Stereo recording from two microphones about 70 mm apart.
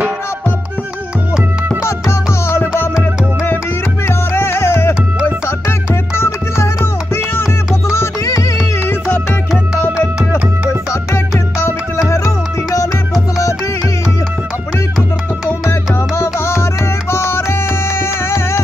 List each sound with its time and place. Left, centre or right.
1.9 s music: left
7.9 s music: left
10.7 s music: left
12.0 s music: left
15.7 s music: left